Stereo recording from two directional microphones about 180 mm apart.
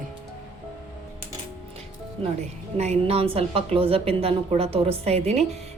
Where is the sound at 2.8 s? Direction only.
35° right (ahead or behind).